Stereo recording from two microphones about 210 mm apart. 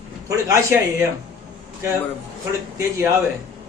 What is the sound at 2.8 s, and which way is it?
Speech, 15° right (ahead or behind).